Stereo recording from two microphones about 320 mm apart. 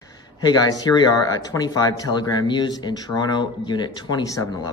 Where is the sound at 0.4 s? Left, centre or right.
Centre.